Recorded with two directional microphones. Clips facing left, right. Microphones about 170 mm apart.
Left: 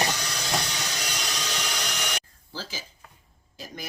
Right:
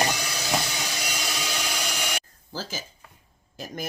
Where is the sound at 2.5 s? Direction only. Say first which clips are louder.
Right 3 dB; 45° right (ahead or behind).